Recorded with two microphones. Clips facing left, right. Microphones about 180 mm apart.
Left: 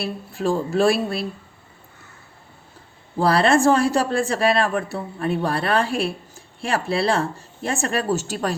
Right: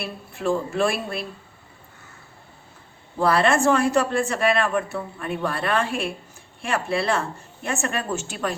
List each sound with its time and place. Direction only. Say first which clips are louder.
0.0 s a woman's voice: left 3 dB; 35° left (ahead or behind)
3.2 s a woman's voice: left 2 dB; 35° left (ahead or behind)